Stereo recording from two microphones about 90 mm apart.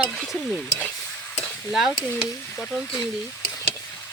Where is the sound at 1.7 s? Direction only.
5° right (ahead or behind).